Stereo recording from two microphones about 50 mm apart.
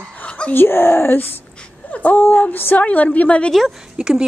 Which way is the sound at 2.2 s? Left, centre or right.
Left.